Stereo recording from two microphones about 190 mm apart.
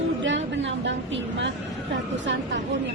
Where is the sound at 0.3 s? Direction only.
70° right (ahead or behind).